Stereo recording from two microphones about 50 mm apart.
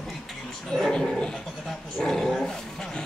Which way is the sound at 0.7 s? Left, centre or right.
Centre.